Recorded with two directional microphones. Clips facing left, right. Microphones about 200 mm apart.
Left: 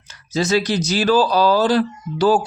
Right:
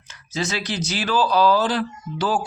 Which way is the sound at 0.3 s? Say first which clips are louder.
Left 8 dB; 40° left (ahead or behind).